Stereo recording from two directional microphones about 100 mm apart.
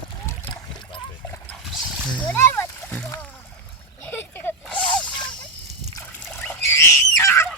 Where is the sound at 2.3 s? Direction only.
25° left (ahead or behind).